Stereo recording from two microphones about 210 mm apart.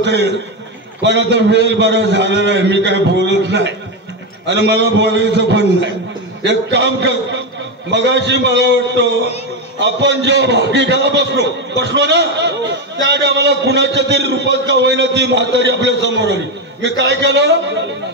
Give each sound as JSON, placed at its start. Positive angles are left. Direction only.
{"t": 1.0, "sound": "a man's voice", "side_deg": -60}